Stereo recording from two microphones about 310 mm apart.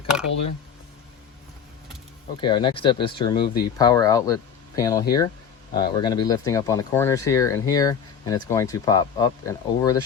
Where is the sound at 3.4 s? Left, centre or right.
Left.